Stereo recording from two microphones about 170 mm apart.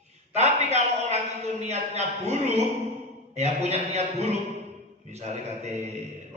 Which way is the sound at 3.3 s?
40° right (ahead or behind).